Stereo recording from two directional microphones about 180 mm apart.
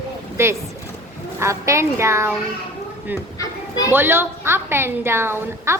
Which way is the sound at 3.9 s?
10° right (ahead or behind).